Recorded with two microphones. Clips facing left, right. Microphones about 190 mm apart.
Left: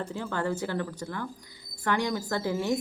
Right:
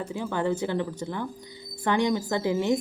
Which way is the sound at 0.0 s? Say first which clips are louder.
Right 3 dB; 15° right (ahead or behind).